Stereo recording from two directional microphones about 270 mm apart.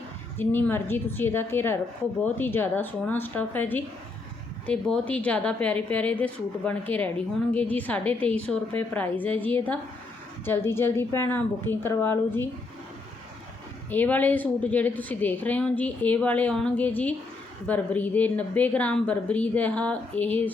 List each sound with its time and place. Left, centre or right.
0.3 s a woman's voice: centre
13.9 s a woman's voice: centre